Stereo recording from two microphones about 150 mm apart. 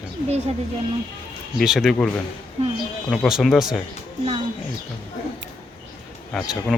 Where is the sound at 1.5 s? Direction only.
Centre (ahead or behind).